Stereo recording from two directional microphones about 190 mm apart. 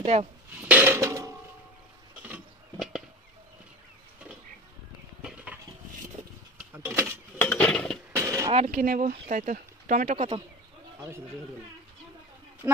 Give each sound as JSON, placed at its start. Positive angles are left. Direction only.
{"t": 0.0, "sound": "speech", "side_deg": -35}
{"t": 0.6, "sound": "dishes", "side_deg": -10}
{"t": 2.2, "sound": "a sound", "side_deg": -5}
{"t": 5.2, "sound": "stir", "side_deg": -5}
{"t": 6.7, "sound": "mechanisms", "side_deg": -10}
{"t": 7.3, "sound": "cutlery", "side_deg": 10}
{"t": 8.1, "sound": "a sound", "side_deg": -15}
{"t": 8.5, "sound": "speech", "side_deg": -35}
{"t": 10.1, "sound": "speech", "side_deg": -30}